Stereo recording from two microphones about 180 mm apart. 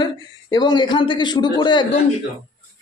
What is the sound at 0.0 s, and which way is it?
A man's voice, 25° left (ahead or behind).